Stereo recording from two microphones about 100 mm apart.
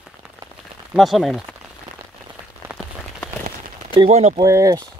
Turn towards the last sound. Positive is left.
turn(degrees=-35)  # may be behind; listen again after turning